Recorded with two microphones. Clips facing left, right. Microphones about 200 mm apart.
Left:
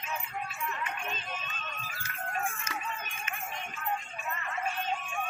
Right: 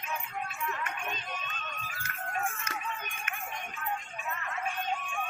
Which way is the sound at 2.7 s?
55° right (ahead or behind).